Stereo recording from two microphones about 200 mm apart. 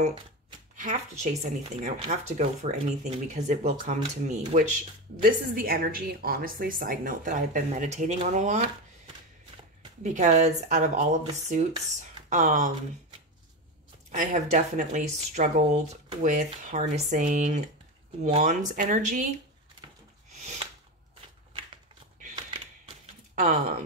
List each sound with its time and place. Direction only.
0.0 s speech: 30° right (ahead or behind)
14.1 s speech: 40° right (ahead or behind)